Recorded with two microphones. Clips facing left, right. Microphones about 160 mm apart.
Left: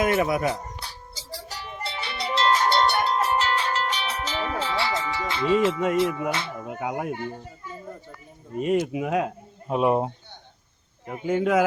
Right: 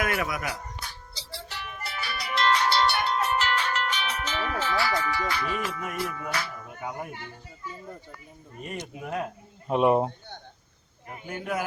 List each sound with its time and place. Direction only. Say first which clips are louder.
0.0 s music: left 7 dB; 25° left (ahead or behind)
2.6 s music: left 3 dB; 45° left (ahead or behind); by 6.7 s 25° left (ahead or behind)
6.7 s speech: left 6 dB; 75° left (ahead or behind)
7.1 s speech: left 10 dB; 50° left (ahead or behind)
8.5 s speech: left 14 dB; 90° left
9.6 s speech: even; centre (ahead or behind)
11.3 s speech: left 10 dB; 90° left